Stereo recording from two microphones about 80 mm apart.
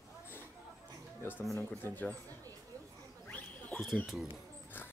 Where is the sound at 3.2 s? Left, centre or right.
Centre.